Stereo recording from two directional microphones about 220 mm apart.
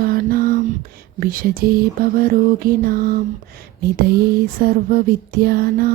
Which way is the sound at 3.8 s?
45° right (ahead or behind).